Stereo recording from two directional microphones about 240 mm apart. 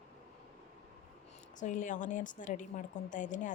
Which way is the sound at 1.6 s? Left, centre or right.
Left.